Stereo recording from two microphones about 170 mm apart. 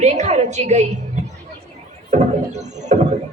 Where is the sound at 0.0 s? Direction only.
40° right (ahead or behind).